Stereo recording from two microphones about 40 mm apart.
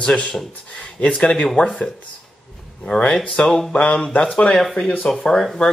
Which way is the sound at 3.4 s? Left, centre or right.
Centre.